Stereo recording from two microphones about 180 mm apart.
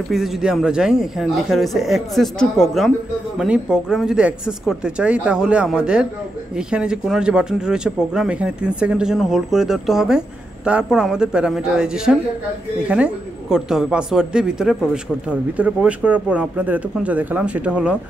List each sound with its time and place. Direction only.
0.1 s a man's voice: 5° right (ahead or behind)